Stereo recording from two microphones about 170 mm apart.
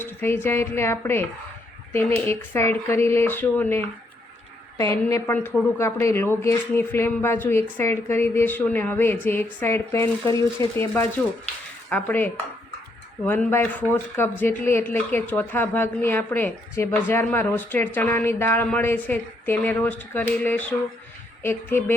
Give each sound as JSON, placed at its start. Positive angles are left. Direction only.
{"t": 0.0, "sound": "speech", "side_deg": 15}